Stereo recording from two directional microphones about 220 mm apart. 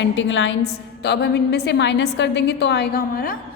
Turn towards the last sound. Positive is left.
turn(degrees=40)  # may be behind; listen again after turning